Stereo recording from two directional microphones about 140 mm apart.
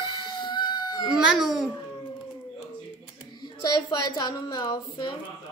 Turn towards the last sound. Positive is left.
turn(degrees=35)  # may be behind; listen again after turning